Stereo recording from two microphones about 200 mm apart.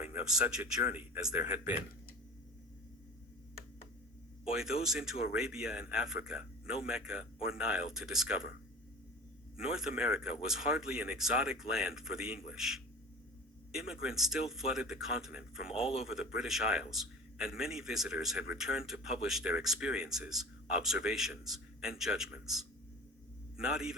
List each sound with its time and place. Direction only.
0.5 s a man's voice: 10° right (ahead or behind)
4.5 s a man's voice: centre (ahead or behind)
9.6 s a man's voice: 5° right (ahead or behind)